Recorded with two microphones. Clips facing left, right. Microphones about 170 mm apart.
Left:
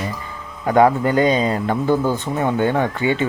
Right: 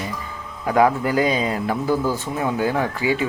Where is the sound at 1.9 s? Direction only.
20° left (ahead or behind).